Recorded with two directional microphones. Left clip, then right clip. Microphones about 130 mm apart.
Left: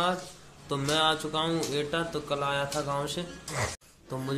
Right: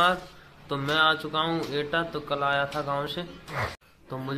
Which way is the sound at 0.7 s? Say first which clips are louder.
Right 3 dB; 20° left (ahead or behind).